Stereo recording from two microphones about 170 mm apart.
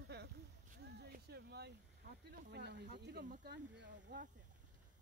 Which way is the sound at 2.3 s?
70° right (ahead or behind).